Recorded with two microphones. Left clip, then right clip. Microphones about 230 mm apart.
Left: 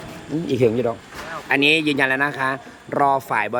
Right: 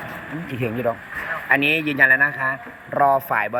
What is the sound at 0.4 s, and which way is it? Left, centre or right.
A man's voice, left.